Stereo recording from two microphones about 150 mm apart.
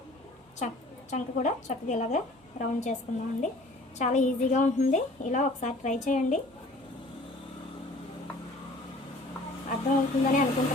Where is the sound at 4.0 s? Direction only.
50° left (ahead or behind).